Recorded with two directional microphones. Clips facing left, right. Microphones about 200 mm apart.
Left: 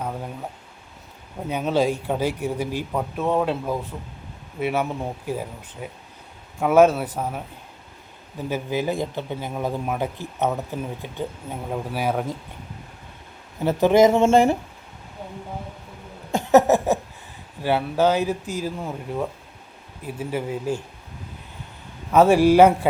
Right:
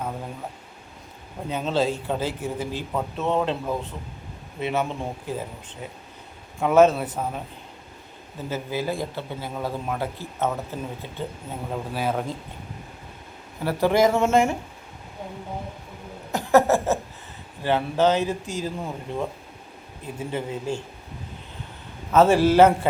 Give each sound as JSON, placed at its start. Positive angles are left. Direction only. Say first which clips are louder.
{"t": 1.5, "sound": "a man's voice", "louder": "left 2 dB", "side_deg": 10}
{"t": 8.4, "sound": "a man's voice", "louder": "left 3 dB", "side_deg": 15}
{"t": 13.7, "sound": "speech", "louder": "left 4 dB", "side_deg": 20}
{"t": 16.3, "sound": "a sound", "louder": "left 2 dB", "side_deg": 20}
{"t": 17.6, "sound": "a man's voice", "louder": "left 1 dB", "side_deg": 10}
{"t": 20.1, "sound": "a man's voice", "louder": "left 2 dB", "side_deg": 10}
{"t": 22.1, "sound": "a man's voice", "louder": "left 2 dB", "side_deg": 10}